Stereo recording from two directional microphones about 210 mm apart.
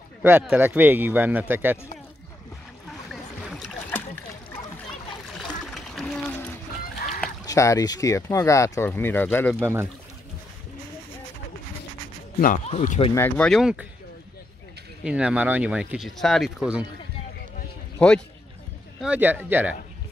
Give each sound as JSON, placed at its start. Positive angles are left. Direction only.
{"t": 0.2, "sound": "a man's voice", "side_deg": -5}
{"t": 3.1, "sound": "boat", "side_deg": 0}
{"t": 5.5, "sound": "a sound", "side_deg": 0}
{"t": 7.4, "sound": "speech", "side_deg": 15}
{"t": 9.6, "sound": "a man's voice", "side_deg": -10}
{"t": 12.4, "sound": "speech", "side_deg": 35}
{"t": 13.1, "sound": "speech", "side_deg": 10}
{"t": 15.0, "sound": "speech", "side_deg": -5}
{"t": 17.9, "sound": "speech", "side_deg": 5}
{"t": 18.9, "sound": "a man's voice", "side_deg": -5}